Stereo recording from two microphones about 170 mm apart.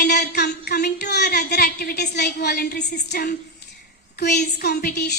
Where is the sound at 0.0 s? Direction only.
75° left (ahead or behind).